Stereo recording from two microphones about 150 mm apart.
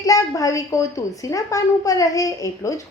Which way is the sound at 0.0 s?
25° left (ahead or behind).